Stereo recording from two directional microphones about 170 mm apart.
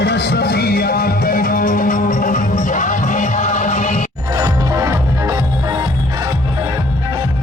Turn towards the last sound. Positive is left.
turn(degrees=-20)  # may be behind; listen again after turning